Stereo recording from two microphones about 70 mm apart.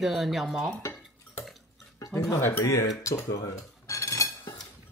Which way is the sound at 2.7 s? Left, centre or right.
Left.